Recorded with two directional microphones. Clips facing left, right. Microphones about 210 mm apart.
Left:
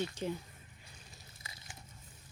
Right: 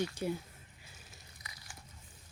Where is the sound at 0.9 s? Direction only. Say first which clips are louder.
Even; centre (ahead or behind).